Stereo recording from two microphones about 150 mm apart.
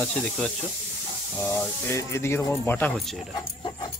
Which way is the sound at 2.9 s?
Centre (ahead or behind).